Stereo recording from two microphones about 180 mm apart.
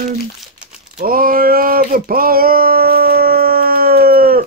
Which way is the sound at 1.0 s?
55° right (ahead or behind).